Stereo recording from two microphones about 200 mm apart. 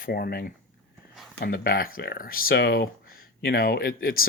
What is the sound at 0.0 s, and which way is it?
Speech, 50° left (ahead or behind).